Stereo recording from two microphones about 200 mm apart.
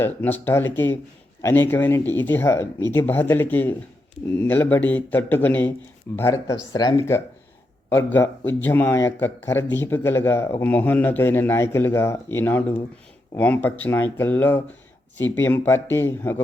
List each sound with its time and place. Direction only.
0.0 s a man's voice: 10° left (ahead or behind)